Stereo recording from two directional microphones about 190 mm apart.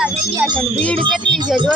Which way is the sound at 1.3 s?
25° right (ahead or behind).